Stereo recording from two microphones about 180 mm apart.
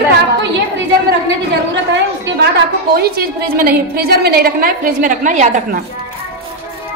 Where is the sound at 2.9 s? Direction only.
55° right (ahead or behind).